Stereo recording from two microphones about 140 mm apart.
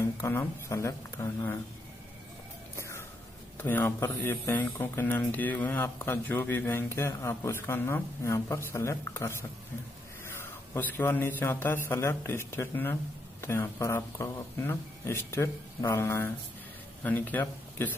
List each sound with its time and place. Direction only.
0.0 s speech: 15° left (ahead or behind)
3.5 s speech: 15° left (ahead or behind)